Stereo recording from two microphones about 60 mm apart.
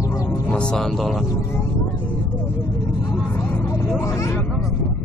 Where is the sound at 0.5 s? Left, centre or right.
Centre.